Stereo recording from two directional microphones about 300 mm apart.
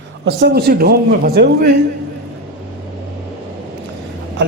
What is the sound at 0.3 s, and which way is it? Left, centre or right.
A man's voice, right.